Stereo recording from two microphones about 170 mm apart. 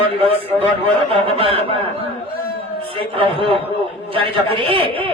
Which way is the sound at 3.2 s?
30° right (ahead or behind).